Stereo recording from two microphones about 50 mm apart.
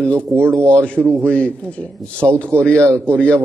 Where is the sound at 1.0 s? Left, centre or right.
Right.